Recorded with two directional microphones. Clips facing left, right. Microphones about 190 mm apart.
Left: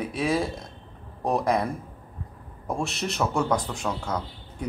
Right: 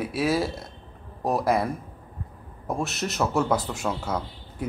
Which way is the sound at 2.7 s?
Centre (ahead or behind).